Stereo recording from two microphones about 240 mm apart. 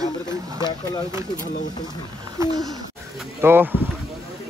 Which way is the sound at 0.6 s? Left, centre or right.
Centre.